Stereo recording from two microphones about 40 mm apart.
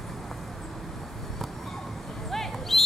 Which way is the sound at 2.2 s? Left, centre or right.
Centre.